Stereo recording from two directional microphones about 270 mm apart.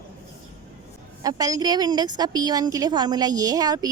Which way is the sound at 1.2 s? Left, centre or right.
Centre.